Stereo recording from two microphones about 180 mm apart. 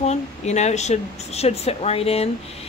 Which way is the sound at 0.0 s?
40° left (ahead or behind).